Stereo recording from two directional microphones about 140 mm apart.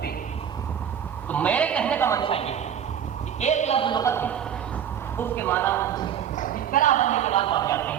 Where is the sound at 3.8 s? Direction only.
35° left (ahead or behind).